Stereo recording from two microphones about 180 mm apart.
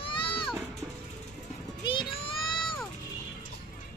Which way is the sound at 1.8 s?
30° left (ahead or behind).